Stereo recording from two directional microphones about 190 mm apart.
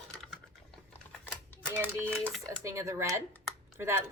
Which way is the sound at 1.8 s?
10° left (ahead or behind).